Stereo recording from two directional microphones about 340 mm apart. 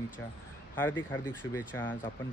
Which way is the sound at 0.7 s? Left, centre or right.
Centre.